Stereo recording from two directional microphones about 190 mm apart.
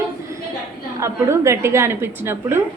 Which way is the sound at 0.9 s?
15° right (ahead or behind).